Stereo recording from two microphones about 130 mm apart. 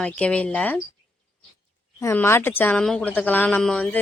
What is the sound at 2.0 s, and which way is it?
Speech, 20° left (ahead or behind).